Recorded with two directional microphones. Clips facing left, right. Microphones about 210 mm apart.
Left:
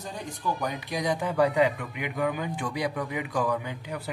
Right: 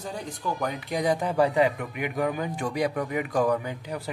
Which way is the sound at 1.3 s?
35° right (ahead or behind).